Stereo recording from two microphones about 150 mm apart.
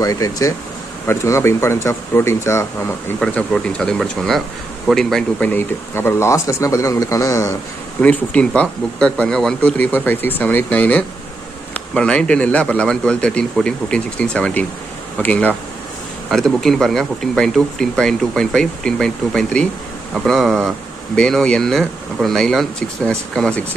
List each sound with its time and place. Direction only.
0.0 s speech: 25° left (ahead or behind)
3.2 s speech: 5° left (ahead or behind)
8.0 s speech: 10° left (ahead or behind)